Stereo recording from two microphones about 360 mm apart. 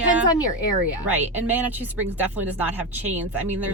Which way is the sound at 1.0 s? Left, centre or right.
Centre.